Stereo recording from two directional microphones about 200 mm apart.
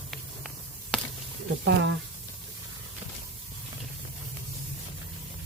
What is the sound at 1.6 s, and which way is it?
Speech, 65° right (ahead or behind).